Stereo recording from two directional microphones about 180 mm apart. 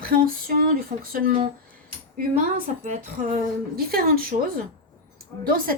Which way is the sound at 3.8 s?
55° right (ahead or behind).